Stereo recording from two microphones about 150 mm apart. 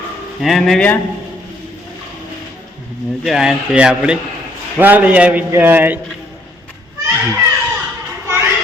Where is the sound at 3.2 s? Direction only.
5° right (ahead or behind).